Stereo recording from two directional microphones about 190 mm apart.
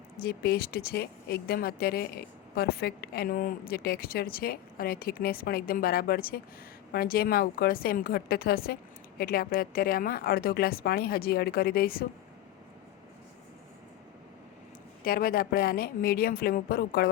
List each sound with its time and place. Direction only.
0.2 s a woman's voice: 55° left (ahead or behind)
15.0 s a woman's voice: 50° left (ahead or behind)